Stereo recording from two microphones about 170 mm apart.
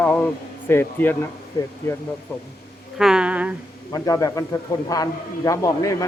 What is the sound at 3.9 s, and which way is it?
A man's voice, 20° left (ahead or behind).